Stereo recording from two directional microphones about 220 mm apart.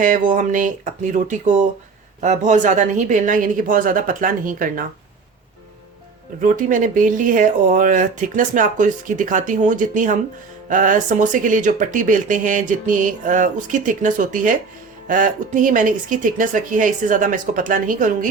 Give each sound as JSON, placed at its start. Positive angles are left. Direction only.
{"t": 0.0, "sound": "speech", "side_deg": -35}
{"t": 6.4, "sound": "speech", "side_deg": -35}